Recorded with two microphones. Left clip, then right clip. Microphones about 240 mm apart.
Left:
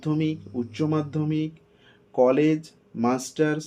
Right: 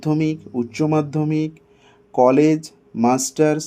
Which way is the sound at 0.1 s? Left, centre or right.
Right.